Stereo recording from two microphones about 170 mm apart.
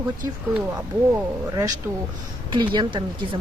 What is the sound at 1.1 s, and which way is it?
Speech, 20° right (ahead or behind).